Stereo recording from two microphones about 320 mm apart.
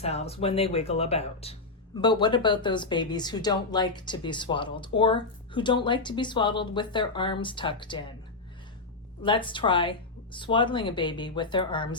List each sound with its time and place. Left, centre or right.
0.0 s speech: centre
9.2 s speech: centre